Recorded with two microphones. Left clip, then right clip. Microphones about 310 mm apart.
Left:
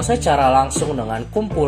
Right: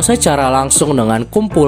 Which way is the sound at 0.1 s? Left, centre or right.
Right.